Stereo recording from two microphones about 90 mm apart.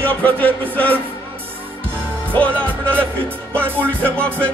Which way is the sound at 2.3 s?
15° left (ahead or behind).